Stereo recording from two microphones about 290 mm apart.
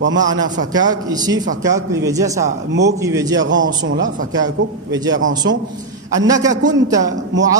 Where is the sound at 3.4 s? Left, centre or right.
Right.